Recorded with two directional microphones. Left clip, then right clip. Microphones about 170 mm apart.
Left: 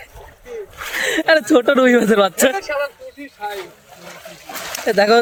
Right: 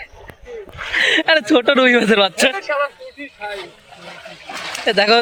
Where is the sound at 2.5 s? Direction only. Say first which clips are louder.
Right 1 dB; 60° left (ahead or behind).